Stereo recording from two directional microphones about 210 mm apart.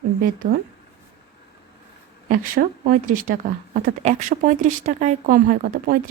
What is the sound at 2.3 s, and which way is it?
Speech, 40° right (ahead or behind).